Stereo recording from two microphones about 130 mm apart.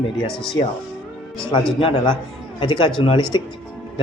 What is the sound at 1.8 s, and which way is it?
Speech, 45° left (ahead or behind).